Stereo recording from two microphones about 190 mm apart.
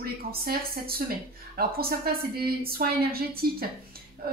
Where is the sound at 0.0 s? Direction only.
55° right (ahead or behind).